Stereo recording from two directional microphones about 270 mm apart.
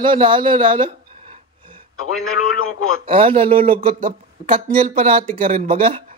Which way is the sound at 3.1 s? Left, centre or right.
Right.